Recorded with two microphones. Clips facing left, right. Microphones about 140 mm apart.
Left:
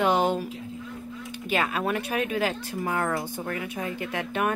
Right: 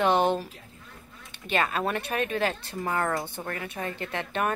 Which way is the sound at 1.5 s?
5° left (ahead or behind).